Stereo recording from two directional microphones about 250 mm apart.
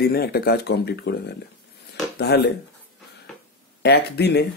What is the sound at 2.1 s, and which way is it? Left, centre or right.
Speech, left.